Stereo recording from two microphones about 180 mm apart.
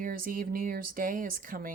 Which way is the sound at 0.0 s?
50° right (ahead or behind).